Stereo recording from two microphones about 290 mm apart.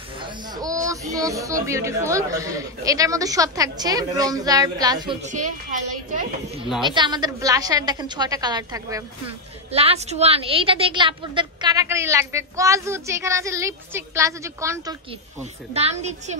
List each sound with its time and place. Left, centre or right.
0.2 s a woman's voice: centre
5.2 s a woman's voice: right
6.8 s a woman's voice: centre
15.7 s a woman's voice: right